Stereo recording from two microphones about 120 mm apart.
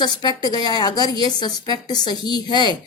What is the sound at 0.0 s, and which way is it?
A woman's voice, 35° left (ahead or behind).